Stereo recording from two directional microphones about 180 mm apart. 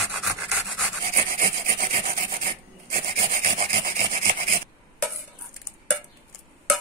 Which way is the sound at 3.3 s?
45° right (ahead or behind).